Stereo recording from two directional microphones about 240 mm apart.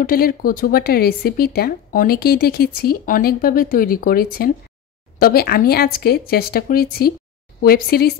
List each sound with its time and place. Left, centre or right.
0.0 s speech: left